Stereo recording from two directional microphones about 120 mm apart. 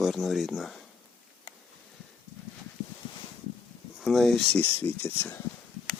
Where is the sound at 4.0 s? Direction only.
Centre (ahead or behind).